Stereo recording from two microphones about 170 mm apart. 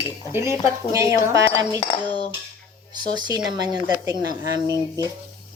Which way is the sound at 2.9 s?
25° right (ahead or behind).